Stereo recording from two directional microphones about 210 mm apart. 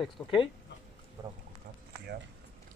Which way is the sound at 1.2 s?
15° right (ahead or behind).